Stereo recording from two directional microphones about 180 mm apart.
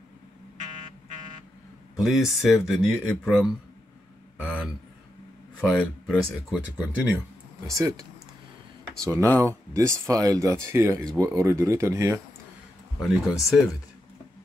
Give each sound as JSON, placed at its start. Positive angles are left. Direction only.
{"t": 2.0, "sound": "speech", "side_deg": 0}
{"t": 4.4, "sound": "a sound", "side_deg": -5}
{"t": 5.6, "sound": "speech", "side_deg": 0}
{"t": 7.6, "sound": "speech", "side_deg": -20}
{"t": 13.0, "sound": "speech", "side_deg": 0}